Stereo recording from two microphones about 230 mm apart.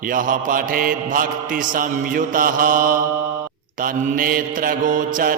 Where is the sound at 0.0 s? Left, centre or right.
Right.